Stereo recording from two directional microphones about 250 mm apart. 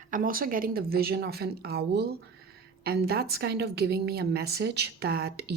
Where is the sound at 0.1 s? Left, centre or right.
Right.